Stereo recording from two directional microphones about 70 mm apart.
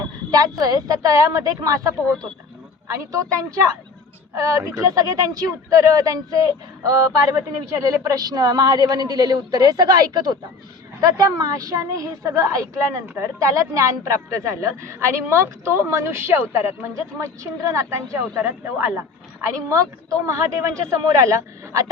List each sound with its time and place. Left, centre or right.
0.3 s a woman's voice: right
11.0 s a woman's voice: right
19.7 s a woman's voice: right